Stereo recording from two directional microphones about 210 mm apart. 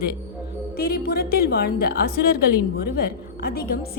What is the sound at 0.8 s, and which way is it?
A woman's voice, 45° left (ahead or behind).